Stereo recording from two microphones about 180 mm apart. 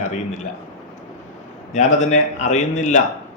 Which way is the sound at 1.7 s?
40° left (ahead or behind).